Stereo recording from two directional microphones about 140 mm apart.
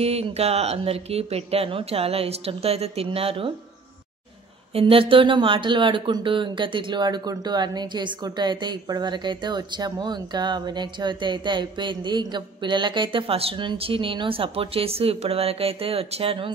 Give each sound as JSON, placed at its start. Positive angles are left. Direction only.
{"t": 0.0, "sound": "speech", "side_deg": -45}
{"t": 4.7, "sound": "speech", "side_deg": -40}